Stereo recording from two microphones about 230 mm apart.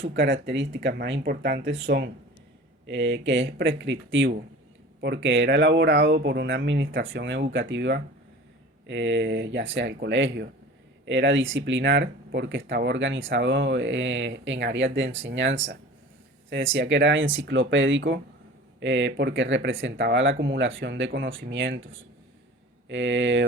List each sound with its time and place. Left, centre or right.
0.0 s speech: right